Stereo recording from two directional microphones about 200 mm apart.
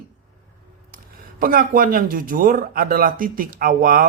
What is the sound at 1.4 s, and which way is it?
Speech, 45° right (ahead or behind).